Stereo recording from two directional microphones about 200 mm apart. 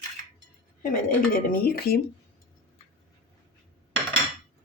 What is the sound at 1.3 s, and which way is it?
Speech, 50° left (ahead or behind).